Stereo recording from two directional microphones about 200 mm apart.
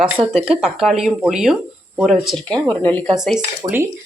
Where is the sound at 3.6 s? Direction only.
20° right (ahead or behind).